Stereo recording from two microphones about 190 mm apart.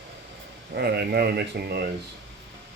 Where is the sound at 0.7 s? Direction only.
55° right (ahead or behind).